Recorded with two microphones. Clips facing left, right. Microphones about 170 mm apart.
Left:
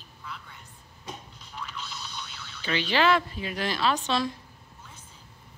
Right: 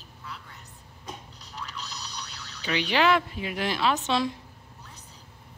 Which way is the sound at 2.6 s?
15° right (ahead or behind).